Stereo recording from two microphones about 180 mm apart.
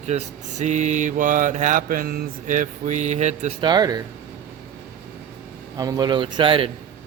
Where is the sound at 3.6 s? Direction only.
25° right (ahead or behind).